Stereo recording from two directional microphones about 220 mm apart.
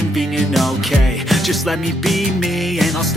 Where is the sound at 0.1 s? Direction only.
Centre (ahead or behind).